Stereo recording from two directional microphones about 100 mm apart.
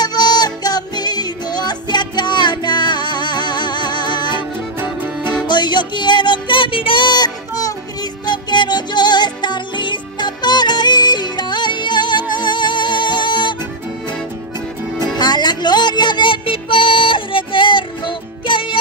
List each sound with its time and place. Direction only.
0.0 s music: 45° left (ahead or behind)
5.5 s music: 50° left (ahead or behind)
15.1 s music: 45° left (ahead or behind)